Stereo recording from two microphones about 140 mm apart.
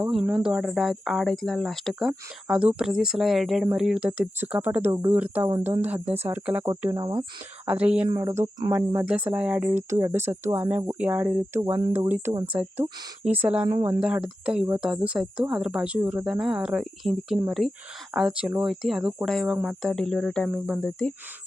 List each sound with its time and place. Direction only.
0.0 s speech: 5° right (ahead or behind)
6.9 s speech: 30° right (ahead or behind)
7.6 s speech: 10° right (ahead or behind)
8.1 s speech: 20° right (ahead or behind); by 21.1 s 5° left (ahead or behind)